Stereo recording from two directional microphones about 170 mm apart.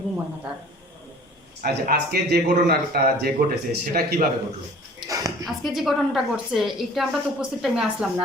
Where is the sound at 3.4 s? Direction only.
50° right (ahead or behind).